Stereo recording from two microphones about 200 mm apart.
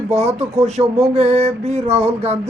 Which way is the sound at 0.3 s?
30° right (ahead or behind).